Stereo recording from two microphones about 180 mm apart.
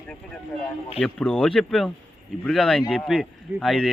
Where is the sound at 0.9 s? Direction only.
5° left (ahead or behind).